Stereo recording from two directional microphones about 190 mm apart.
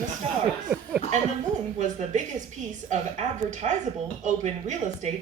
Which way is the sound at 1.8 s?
40° right (ahead or behind).